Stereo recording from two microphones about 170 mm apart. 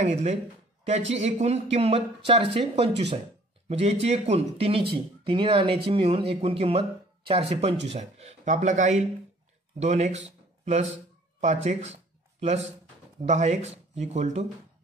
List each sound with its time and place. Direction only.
0.0 s speech: 40° right (ahead or behind)